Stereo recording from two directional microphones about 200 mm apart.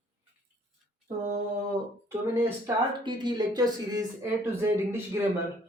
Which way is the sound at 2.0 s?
10° right (ahead or behind).